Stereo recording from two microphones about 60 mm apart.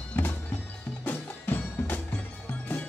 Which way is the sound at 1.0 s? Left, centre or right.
Left.